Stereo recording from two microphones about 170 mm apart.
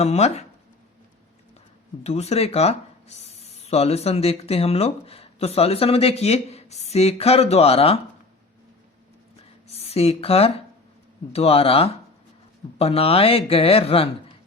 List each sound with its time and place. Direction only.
0.0 s speech: 40° left (ahead or behind)
2.0 s speech: 40° left (ahead or behind)
9.6 s speech: 35° left (ahead or behind)